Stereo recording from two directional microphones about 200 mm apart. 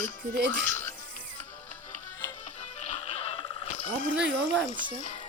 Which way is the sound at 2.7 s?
30° left (ahead or behind).